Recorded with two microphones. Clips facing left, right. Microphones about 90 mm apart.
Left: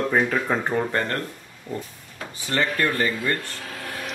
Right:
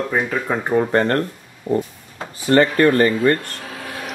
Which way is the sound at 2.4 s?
55° right (ahead or behind).